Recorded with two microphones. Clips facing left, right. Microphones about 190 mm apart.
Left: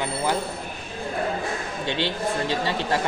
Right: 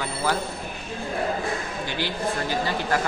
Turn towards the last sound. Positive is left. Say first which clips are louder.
# even
turn(degrees=25)  # may be behind; listen again after turning